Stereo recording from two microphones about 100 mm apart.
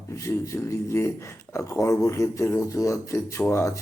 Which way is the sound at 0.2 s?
30° left (ahead or behind).